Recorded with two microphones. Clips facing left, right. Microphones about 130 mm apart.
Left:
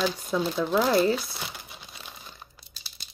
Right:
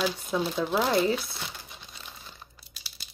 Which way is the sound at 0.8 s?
40° left (ahead or behind).